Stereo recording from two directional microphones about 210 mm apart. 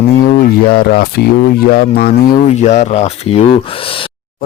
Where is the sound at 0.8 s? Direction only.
45° left (ahead or behind).